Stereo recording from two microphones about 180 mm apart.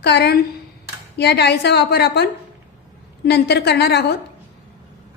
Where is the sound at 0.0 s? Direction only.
65° left (ahead or behind).